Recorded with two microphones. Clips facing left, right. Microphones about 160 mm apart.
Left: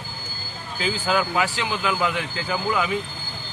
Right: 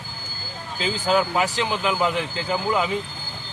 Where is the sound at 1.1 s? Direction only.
25° right (ahead or behind).